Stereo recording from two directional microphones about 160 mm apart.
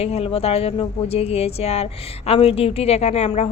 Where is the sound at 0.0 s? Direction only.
40° left (ahead or behind).